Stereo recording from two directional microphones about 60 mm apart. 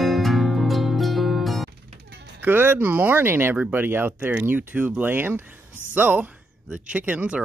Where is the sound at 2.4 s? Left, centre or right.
Right.